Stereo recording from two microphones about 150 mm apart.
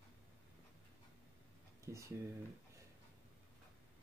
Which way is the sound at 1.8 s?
20° right (ahead or behind).